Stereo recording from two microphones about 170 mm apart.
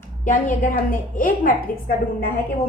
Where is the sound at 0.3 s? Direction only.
50° left (ahead or behind).